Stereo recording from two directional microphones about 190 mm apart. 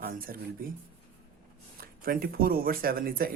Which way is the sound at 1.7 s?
50° right (ahead or behind).